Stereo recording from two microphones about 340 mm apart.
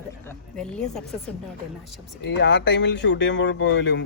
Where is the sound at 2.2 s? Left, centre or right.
Left.